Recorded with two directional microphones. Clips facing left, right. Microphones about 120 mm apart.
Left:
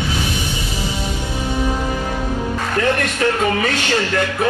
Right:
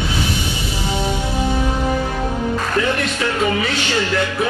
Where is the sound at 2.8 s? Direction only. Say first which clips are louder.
Left 2 dB; 45° left (ahead or behind).